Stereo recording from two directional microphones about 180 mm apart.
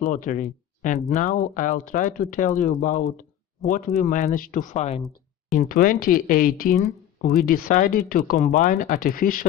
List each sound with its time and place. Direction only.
0.0 s speech: 45° left (ahead or behind)
5.5 s speech: 55° left (ahead or behind)